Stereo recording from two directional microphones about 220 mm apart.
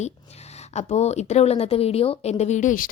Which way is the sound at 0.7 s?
30° left (ahead or behind).